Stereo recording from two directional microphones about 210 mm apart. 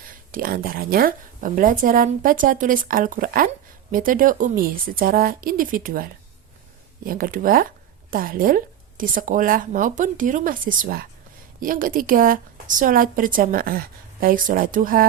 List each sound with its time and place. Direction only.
0.3 s a woman's voice: 40° right (ahead or behind)